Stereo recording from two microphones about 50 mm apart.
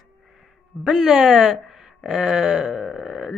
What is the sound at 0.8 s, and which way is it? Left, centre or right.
Speech, centre.